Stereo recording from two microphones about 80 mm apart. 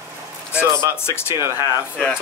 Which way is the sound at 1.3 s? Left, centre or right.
Right.